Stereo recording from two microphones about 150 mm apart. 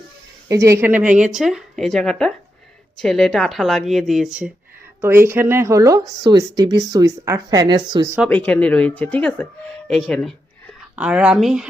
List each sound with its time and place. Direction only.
0.4 s a woman's voice: 20° right (ahead or behind)
8.3 s speech: 10° left (ahead or behind)
10.9 s speech: 5° right (ahead or behind)